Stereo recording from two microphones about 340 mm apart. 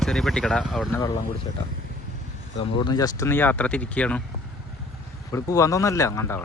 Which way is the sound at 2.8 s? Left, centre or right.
Centre.